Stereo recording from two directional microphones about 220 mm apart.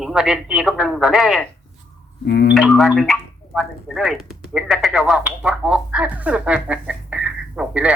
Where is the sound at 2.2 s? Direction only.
50° left (ahead or behind).